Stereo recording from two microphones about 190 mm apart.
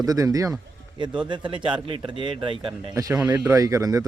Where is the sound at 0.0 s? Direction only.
20° right (ahead or behind).